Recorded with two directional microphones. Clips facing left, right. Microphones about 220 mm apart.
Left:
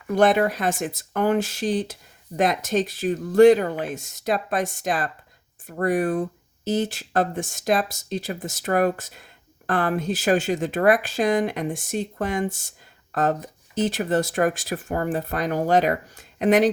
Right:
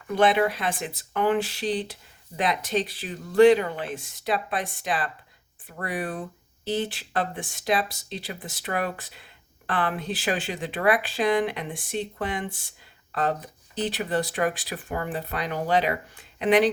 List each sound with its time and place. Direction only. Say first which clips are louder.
0.1 s speech: left 3 dB; 45° left (ahead or behind)